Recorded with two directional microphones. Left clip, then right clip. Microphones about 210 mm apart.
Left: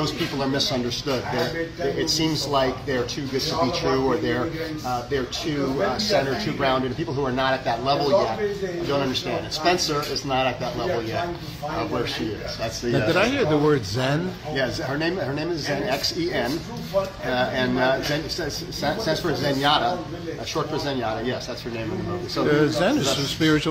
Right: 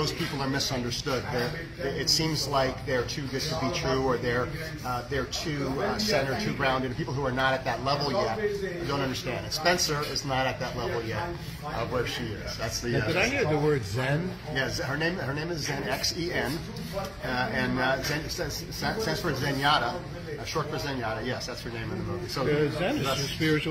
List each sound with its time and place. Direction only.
0.0 s speech: 10° right (ahead or behind)
2.1 s speech: 5° right (ahead or behind)
6.1 s speech: 5° right (ahead or behind)
9.7 s speech: 10° right (ahead or behind)
13.1 s speech: 10° left (ahead or behind)
17.4 s speech: centre (ahead or behind)
22.5 s speech: 20° left (ahead or behind)